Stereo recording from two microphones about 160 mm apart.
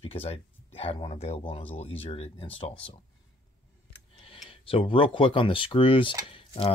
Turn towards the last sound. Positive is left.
turn(degrees=35)  # may be behind; listen again after turning